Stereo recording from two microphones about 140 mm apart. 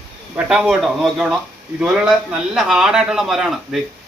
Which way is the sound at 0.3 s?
5° right (ahead or behind).